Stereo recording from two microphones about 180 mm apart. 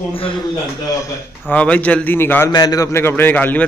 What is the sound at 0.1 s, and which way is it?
Speech, 30° left (ahead or behind).